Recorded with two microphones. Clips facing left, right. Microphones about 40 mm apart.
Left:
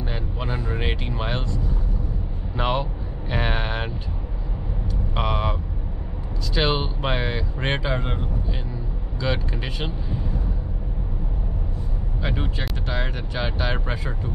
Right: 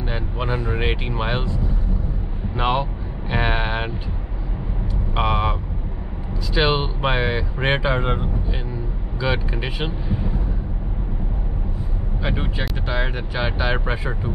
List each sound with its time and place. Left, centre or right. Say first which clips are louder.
0.0 s speech: right 4 dB; centre
5.1 s speech: right 4 dB; centre
12.2 s speech: right 3 dB; centre